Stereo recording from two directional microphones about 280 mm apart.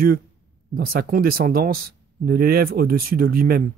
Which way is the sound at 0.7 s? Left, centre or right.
Right.